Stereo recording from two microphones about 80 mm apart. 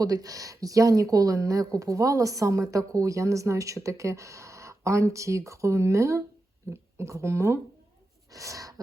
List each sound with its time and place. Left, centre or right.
0.0 s speech: right